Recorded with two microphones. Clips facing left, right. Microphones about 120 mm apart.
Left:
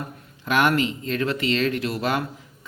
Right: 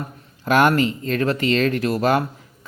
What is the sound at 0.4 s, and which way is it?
Speech, 40° right (ahead or behind).